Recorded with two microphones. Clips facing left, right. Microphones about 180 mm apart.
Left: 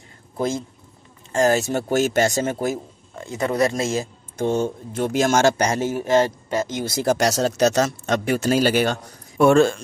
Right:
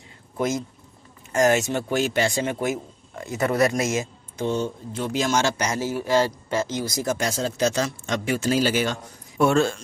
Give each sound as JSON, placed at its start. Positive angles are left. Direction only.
{"t": 0.4, "sound": "a man's voice", "side_deg": 30}
{"t": 3.3, "sound": "speech", "side_deg": 20}
{"t": 5.6, "sound": "speech", "side_deg": 25}
{"t": 7.1, "sound": "speech", "side_deg": 75}
{"t": 7.8, "sound": "a man's voice", "side_deg": 55}